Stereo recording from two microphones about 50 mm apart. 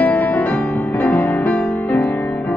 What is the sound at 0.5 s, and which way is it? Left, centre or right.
Music, left.